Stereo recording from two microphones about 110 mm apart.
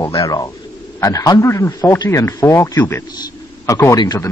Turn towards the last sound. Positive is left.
turn(degrees=25)  # may be behind; listen again after turning